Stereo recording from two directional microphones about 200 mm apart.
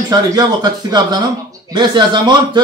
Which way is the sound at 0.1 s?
20° right (ahead or behind).